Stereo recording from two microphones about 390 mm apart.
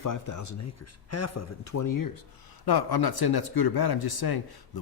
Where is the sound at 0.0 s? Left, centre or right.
Left.